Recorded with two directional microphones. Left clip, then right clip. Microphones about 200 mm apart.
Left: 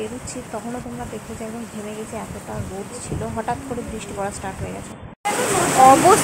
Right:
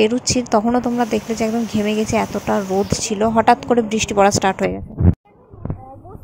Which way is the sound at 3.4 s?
45° right (ahead or behind).